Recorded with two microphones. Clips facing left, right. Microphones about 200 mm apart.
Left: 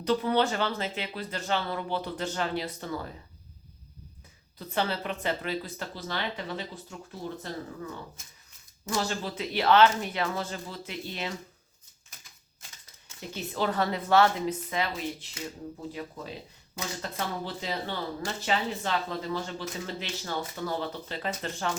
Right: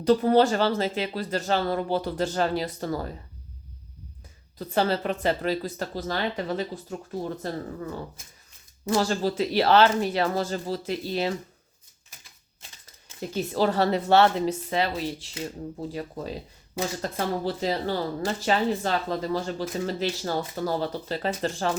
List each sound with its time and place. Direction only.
0.0 s speech: 40° right (ahead or behind)
4.5 s speech: 40° right (ahead or behind)
8.9 s speech: 40° right (ahead or behind)
13.3 s a woman's voice: 45° right (ahead or behind)
13.7 s speech: 30° right (ahead or behind)